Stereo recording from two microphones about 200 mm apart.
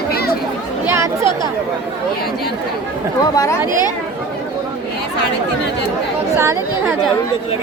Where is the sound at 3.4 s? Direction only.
15° left (ahead or behind).